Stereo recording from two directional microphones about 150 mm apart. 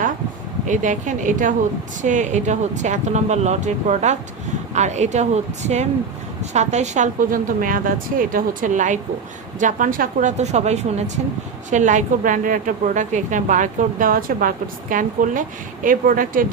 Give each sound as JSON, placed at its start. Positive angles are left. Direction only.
{"t": 0.7, "sound": "a woman's voice", "side_deg": -55}